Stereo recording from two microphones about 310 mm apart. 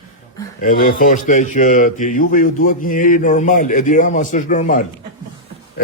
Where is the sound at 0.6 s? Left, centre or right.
Left.